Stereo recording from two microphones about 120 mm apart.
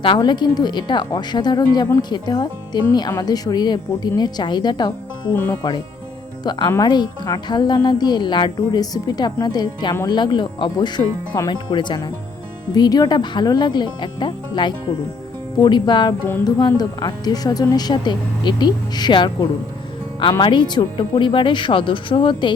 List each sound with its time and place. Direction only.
0.0 s a woman's voice: 40° left (ahead or behind)
5.3 s speech: 15° left (ahead or behind)
6.4 s a woman's voice: 35° left (ahead or behind)